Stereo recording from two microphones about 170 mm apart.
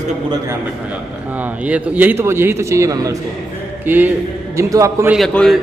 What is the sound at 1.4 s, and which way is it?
A man's voice, 10° right (ahead or behind).